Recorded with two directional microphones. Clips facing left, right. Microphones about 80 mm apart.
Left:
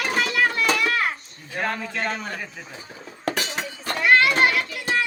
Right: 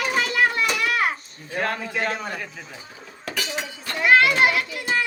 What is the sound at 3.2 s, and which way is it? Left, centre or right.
Chink, left.